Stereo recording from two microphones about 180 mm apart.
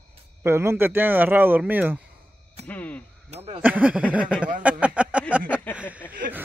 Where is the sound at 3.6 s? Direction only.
10° right (ahead or behind).